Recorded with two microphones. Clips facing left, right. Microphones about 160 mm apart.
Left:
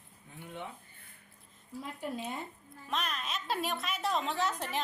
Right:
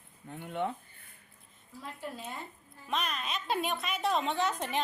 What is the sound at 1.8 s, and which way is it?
Speech, 15° left (ahead or behind).